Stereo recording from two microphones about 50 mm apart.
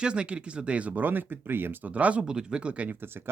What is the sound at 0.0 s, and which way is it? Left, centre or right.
Speech, right.